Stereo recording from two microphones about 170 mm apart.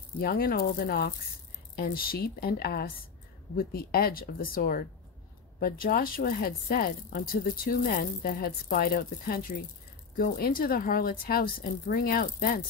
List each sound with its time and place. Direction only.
0.2 s speech: 60° left (ahead or behind)